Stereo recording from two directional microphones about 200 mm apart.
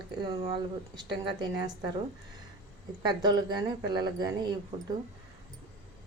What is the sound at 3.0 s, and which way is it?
Speech, 20° right (ahead or behind).